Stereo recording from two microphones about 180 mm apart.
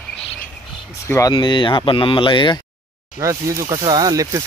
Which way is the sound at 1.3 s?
25° left (ahead or behind).